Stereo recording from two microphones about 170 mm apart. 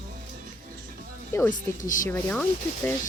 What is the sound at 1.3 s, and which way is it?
Speech, 15° left (ahead or behind).